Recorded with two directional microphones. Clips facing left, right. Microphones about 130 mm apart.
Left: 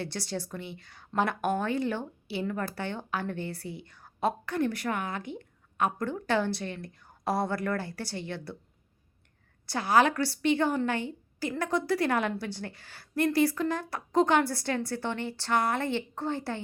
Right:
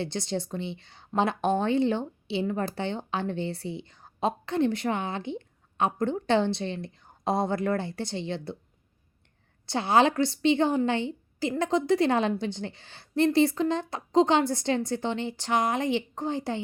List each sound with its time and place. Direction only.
0.0 s a woman's voice: 20° right (ahead or behind)
9.6 s a woman's voice: 25° right (ahead or behind)